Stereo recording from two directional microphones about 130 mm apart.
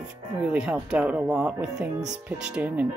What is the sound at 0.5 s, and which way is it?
Speech, 5° right (ahead or behind).